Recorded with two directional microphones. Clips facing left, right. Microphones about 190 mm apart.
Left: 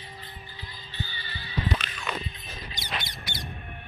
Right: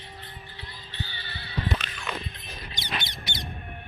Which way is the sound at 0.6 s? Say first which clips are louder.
Left 1 dB; 65° right (ahead or behind).